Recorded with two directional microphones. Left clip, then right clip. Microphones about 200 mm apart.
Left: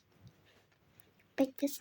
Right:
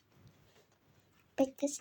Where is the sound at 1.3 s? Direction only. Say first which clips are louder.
Right 1 dB; 15° left (ahead or behind).